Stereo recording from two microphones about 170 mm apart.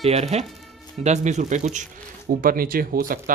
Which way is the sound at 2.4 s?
55° right (ahead or behind).